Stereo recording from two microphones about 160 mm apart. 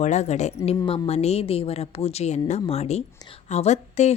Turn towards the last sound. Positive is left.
turn(degrees=45)  # may be behind; listen again after turning